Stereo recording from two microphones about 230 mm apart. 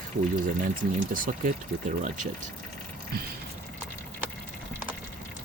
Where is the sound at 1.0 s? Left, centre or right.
Right.